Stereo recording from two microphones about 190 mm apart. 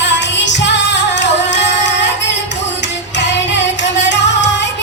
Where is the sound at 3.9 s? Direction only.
70° left (ahead or behind).